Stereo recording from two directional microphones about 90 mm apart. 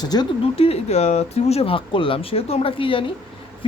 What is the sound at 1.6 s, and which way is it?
Speech, 85° left.